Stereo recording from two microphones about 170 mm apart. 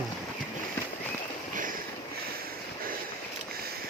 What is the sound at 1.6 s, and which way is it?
Vehicle, 50° right (ahead or behind).